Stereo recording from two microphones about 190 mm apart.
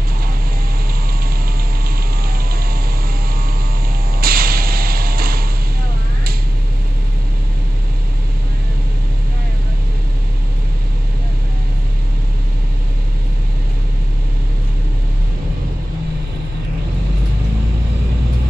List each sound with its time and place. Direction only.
4.2 s whip: 50° right (ahead or behind)